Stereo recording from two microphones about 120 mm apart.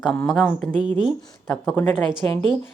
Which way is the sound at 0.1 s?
15° left (ahead or behind).